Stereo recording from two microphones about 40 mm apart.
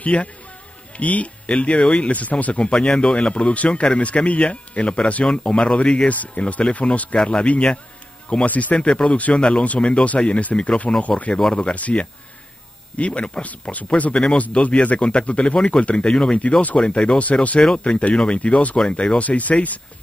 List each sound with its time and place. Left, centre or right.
0.0 s speech: left
2.7 s speech: left
5.2 s speech: left
6.0 s speech: left
8.7 s speech: left
14.1 s speech: left
16.1 s speech: centre
17.2 s speech: left
18.4 s speech: left